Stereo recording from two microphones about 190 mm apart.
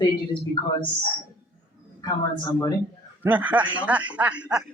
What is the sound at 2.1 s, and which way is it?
Speech, 20° left (ahead or behind).